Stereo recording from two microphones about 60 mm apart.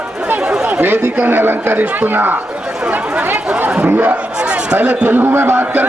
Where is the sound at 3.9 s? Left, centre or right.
Right.